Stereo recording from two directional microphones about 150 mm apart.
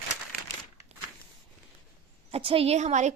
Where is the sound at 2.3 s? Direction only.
40° right (ahead or behind).